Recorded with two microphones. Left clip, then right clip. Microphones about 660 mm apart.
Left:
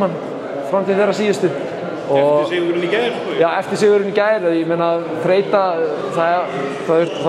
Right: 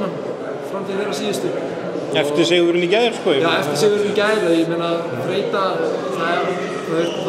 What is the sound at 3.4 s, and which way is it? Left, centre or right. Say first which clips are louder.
Speech: left 6 dB; left.